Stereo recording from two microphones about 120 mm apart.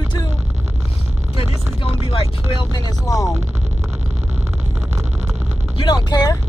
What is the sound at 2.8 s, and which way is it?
Speech, 30° left (ahead or behind).